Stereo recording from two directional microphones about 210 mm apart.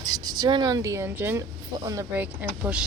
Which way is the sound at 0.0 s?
20° right (ahead or behind).